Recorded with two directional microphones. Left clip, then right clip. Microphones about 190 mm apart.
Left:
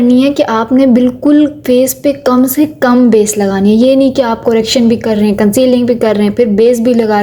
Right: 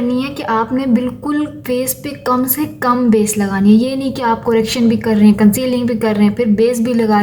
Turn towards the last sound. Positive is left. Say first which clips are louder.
# left 5 dB
turn(degrees=25)  # may be behind; listen again after turning